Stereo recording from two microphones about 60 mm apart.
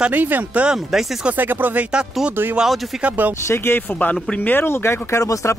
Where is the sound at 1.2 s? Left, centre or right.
Right.